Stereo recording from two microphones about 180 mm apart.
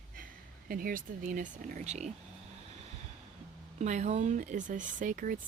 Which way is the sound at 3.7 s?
40° right (ahead or behind).